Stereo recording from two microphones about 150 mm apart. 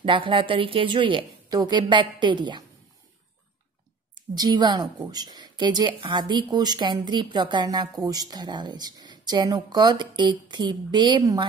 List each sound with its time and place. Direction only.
0.0 s a woman's voice: 35° right (ahead or behind)
4.1 s a woman's voice: 30° right (ahead or behind)